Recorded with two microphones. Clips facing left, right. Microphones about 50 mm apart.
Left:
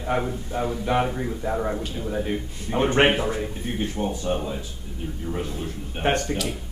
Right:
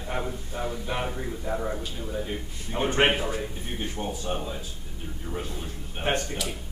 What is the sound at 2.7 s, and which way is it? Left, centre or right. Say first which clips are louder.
Speech: left 5 dB; left.